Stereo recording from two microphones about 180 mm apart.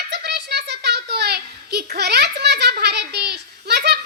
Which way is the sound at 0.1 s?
65° right (ahead or behind).